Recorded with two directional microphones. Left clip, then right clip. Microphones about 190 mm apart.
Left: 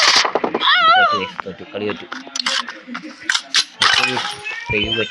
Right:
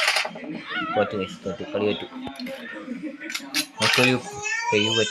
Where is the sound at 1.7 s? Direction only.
Centre (ahead or behind).